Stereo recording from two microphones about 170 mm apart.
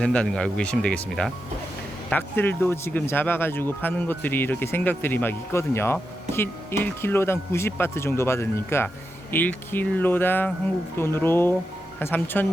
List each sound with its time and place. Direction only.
0.0 s speech: 5° left (ahead or behind)